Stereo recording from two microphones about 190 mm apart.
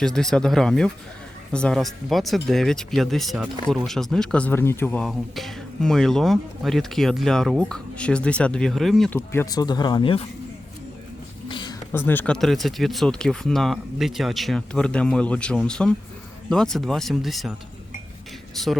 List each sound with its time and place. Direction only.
0.0 s speech: centre (ahead or behind); by 10.2 s 30° left (ahead or behind)
11.4 s a sound: 25° left (ahead or behind)
11.9 s speech: 10° left (ahead or behind)
18.5 s speech: centre (ahead or behind)